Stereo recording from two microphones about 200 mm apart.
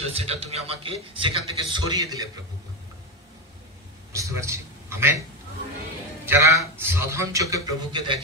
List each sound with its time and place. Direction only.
0.0 s a man's voice: 30° right (ahead or behind)
4.1 s a sound: 15° right (ahead or behind)
6.2 s a man's voice: 15° right (ahead or behind)